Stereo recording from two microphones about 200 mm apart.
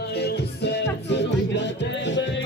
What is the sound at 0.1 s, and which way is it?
Music, 55° left (ahead or behind).